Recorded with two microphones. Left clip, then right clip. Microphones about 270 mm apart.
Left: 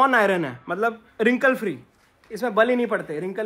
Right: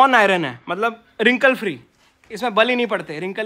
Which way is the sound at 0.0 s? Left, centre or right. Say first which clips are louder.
Right 5 dB; right.